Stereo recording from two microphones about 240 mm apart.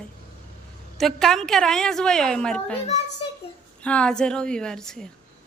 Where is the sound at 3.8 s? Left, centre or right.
Centre.